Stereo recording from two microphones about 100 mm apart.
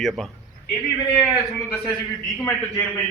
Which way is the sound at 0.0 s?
Centre (ahead or behind).